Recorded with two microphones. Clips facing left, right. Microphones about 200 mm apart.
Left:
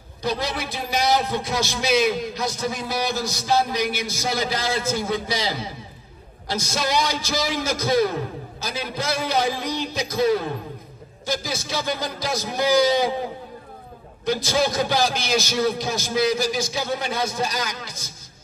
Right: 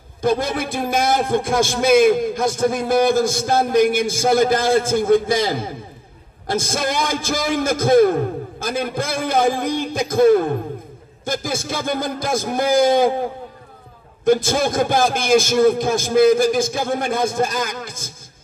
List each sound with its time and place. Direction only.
0.2 s a man's voice: 50° right (ahead or behind)
14.2 s a man's voice: 50° right (ahead or behind)